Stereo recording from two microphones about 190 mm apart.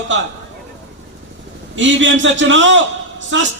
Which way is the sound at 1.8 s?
80° right.